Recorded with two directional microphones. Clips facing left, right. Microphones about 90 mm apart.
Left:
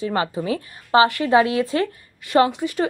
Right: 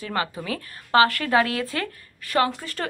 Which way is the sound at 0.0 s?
25° left (ahead or behind).